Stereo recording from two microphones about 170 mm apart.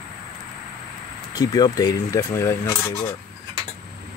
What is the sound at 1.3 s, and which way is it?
Speech, 25° left (ahead or behind).